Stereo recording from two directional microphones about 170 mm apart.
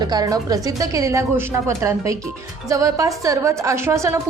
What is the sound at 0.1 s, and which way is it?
A woman's voice, 20° right (ahead or behind).